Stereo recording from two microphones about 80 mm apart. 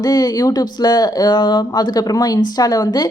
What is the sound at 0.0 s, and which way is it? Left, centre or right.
A woman's voice, left.